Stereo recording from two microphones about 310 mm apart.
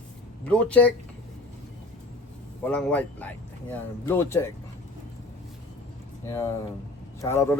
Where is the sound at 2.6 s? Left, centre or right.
Centre.